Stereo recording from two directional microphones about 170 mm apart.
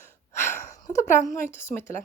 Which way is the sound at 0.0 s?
15° left (ahead or behind).